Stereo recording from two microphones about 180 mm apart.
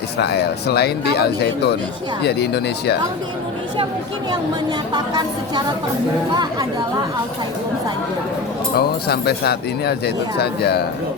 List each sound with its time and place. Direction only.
0.2 s speech: 65° left (ahead or behind)
4.9 s speech: 20° right (ahead or behind)
8.7 s speech: 60° left (ahead or behind)